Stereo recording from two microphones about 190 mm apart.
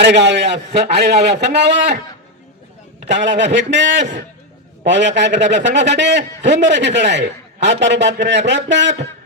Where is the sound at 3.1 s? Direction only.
65° right (ahead or behind).